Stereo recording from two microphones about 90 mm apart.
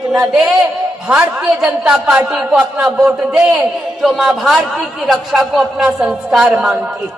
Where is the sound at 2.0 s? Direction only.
10° right (ahead or behind).